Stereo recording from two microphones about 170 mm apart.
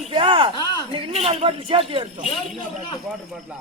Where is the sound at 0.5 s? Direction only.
25° left (ahead or behind).